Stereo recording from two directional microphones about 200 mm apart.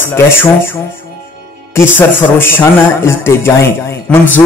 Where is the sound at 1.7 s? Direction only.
10° left (ahead or behind).